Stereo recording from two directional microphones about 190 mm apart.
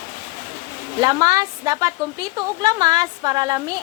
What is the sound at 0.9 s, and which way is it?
A woman's voice, 20° right (ahead or behind).